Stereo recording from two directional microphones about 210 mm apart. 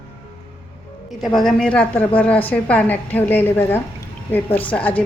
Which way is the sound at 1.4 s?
5° left (ahead or behind).